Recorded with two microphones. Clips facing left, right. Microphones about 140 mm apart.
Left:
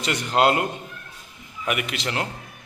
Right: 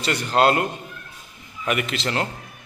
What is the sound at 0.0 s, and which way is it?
Speech, 20° left (ahead or behind).